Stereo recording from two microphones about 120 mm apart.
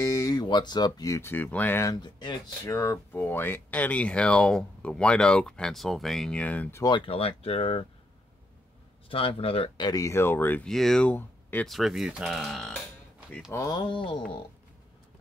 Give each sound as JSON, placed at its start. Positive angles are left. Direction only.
{"t": 0.0, "sound": "speech", "side_deg": 30}
{"t": 1.3, "sound": "speech", "side_deg": 15}
{"t": 2.0, "sound": "speech", "side_deg": 40}
{"t": 2.6, "sound": "speech", "side_deg": 25}
{"t": 6.8, "sound": "speech", "side_deg": 40}
{"t": 9.1, "sound": "speech", "side_deg": 50}
{"t": 9.8, "sound": "speech", "side_deg": 30}
{"t": 10.7, "sound": "speech", "side_deg": 5}
{"t": 11.6, "sound": "speech", "side_deg": 0}
{"t": 13.5, "sound": "speech", "side_deg": 30}